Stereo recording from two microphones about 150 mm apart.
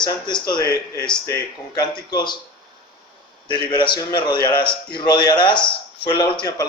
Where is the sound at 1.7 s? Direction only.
25° left (ahead or behind).